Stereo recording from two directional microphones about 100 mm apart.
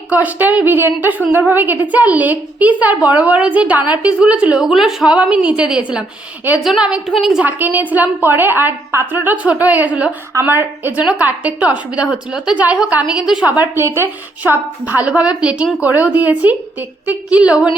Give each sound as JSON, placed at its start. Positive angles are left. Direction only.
{"t": 0.1, "sound": "a woman's voice", "side_deg": -15}
{"t": 7.4, "sound": "a woman's voice", "side_deg": -15}